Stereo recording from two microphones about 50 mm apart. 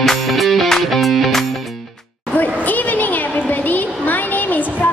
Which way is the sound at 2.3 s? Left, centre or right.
Left.